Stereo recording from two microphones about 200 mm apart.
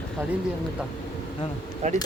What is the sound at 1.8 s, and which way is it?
Speech, 35° right (ahead or behind).